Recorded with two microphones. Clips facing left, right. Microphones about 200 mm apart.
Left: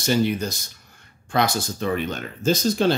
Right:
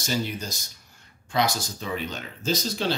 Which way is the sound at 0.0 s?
60° left (ahead or behind).